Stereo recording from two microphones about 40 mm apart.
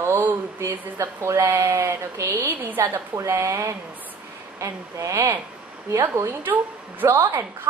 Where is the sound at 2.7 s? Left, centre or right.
Right.